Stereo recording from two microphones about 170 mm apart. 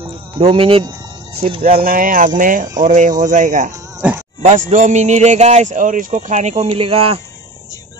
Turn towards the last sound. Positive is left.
turn(degrees=-35)  # may be behind; listen again after turning